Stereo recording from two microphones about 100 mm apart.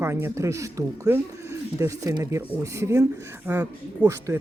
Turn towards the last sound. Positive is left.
turn(degrees=-25)  # may be behind; listen again after turning